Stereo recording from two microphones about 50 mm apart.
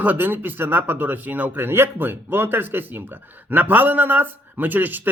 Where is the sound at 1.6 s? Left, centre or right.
Right.